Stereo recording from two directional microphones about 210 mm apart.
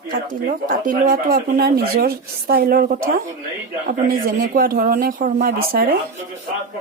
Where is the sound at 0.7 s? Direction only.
40° right (ahead or behind).